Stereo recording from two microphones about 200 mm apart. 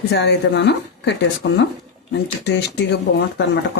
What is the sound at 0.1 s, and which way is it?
Speech, 60° left (ahead or behind).